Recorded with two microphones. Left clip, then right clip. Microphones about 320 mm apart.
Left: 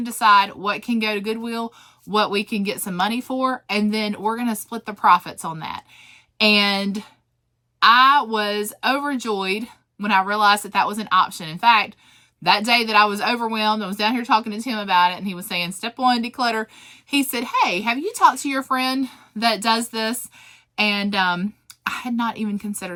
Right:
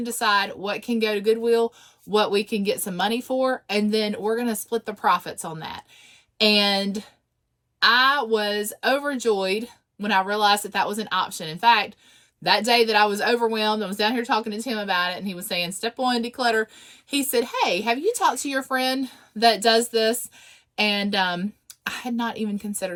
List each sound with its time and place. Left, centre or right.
0.0 s speech: centre
3.2 s speech: left
3.4 s speech: centre
17.7 s speech: left
18.4 s speech: centre